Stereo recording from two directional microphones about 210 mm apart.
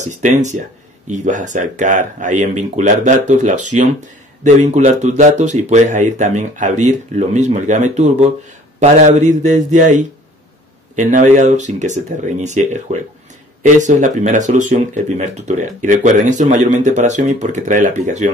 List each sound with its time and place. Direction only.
0.0 s speech: 35° right (ahead or behind)